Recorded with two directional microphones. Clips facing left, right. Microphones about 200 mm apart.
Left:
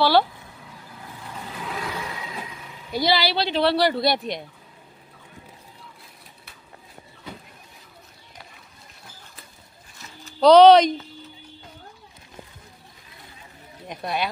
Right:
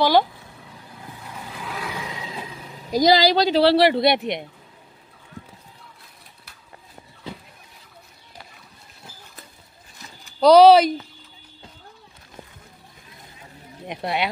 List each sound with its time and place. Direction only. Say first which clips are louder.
0.0 s speech: right 1 dB; 15° right (ahead or behind)
1.5 s a sound: left 1 dB; centre (ahead or behind)
2.0 s speech: right 1 dB; 20° right (ahead or behind)
10.4 s speech: even; 5° right (ahead or behind)
13.8 s speech: right 2 dB; 25° right (ahead or behind)